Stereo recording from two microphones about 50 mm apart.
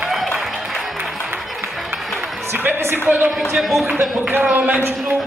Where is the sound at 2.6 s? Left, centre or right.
Right.